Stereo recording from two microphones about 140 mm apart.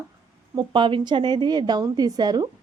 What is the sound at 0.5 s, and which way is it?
A woman's voice, 35° right (ahead or behind).